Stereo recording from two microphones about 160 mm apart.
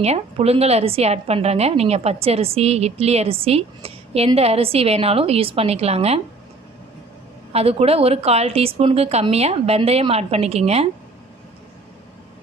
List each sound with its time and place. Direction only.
0.0 s a woman's voice: 40° right (ahead or behind)
7.5 s a woman's voice: 40° right (ahead or behind)